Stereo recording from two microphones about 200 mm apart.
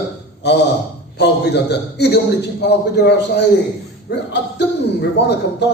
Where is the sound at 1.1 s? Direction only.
55° left (ahead or behind).